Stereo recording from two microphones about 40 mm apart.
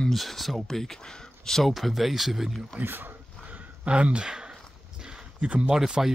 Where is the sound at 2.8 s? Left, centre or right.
Right.